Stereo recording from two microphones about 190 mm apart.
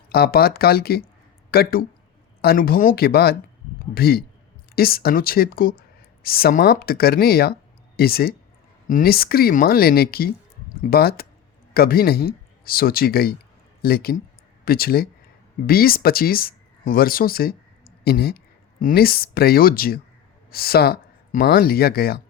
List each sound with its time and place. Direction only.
0.1 s speech: 55° left (ahead or behind)